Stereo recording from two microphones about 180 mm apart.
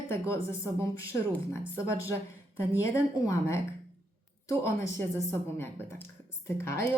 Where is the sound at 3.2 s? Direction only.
15° left (ahead or behind).